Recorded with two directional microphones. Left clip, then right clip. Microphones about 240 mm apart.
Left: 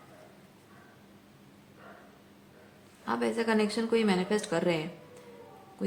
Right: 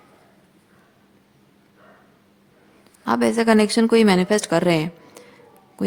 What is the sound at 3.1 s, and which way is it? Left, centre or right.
Speech, right.